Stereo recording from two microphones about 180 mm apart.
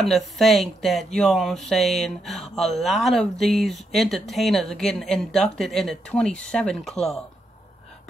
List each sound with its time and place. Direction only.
0.0 s speech: centre (ahead or behind)